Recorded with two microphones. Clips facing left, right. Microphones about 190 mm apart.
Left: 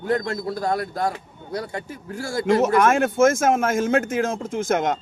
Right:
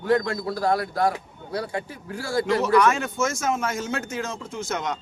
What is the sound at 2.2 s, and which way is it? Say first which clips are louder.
A man's voice: left 3 dB; 45° left (ahead or behind).